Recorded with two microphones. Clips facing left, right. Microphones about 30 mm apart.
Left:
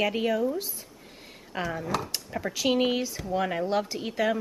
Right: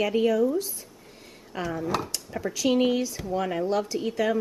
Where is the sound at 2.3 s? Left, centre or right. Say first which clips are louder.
Right 2 dB; centre.